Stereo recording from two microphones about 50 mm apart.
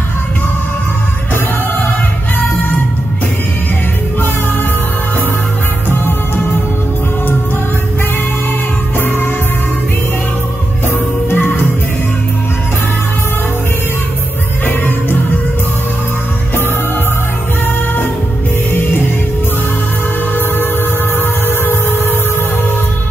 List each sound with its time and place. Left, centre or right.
5.9 s music: left
9.0 s music: left
10.9 s music: left
14.7 s music: left
18.7 s music: left
21.2 s music: left